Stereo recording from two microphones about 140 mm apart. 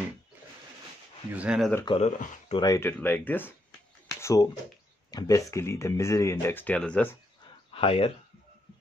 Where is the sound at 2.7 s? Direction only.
15° left (ahead or behind).